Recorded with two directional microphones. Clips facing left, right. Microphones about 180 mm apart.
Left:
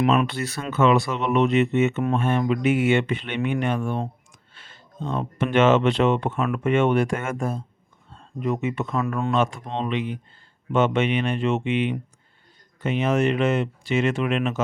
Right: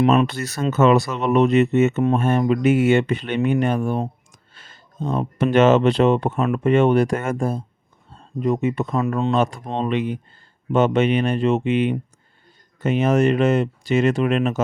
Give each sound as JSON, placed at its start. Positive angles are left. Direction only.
{"t": 0.3, "sound": "speech", "side_deg": -40}
{"t": 4.3, "sound": "a sound", "side_deg": -40}
{"t": 5.4, "sound": "speech", "side_deg": -40}